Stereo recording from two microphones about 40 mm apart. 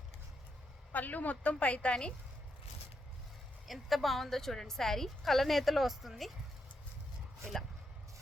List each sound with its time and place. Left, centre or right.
0.9 s a woman's voice: left
3.7 s a woman's voice: centre